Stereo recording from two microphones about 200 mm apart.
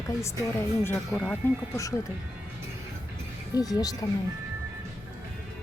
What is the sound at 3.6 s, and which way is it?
Speech, 20° left (ahead or behind).